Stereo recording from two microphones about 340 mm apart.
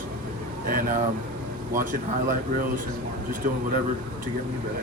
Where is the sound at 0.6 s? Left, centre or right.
Right.